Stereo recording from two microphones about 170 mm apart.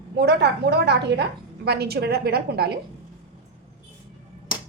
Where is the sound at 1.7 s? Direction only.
70° right (ahead or behind).